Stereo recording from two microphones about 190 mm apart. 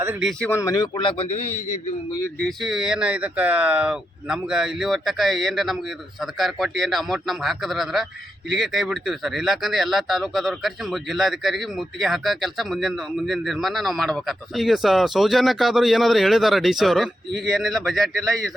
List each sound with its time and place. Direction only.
0.0 s speech: 10° right (ahead or behind)
0.3 s speech: 5° left (ahead or behind); by 1.5 s 35° left (ahead or behind)
1.5 s a man's voice: 15° left (ahead or behind)
2.4 s speech: centre (ahead or behind)